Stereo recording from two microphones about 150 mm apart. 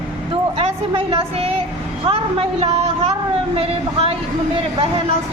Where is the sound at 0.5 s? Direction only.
40° right (ahead or behind).